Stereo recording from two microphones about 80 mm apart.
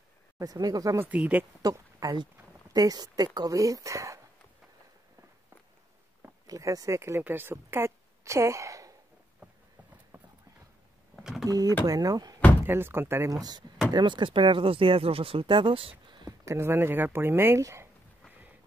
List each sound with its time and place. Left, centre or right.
0.4 s speech: right
0.9 s speech: centre
1.6 s speech: right
6.4 s speech: right
11.1 s a sound: centre
11.4 s speech: right
12.6 s speech: right
13.3 s speech: right
13.9 s speech: right
16.4 s speech: right
17.6 s speech: right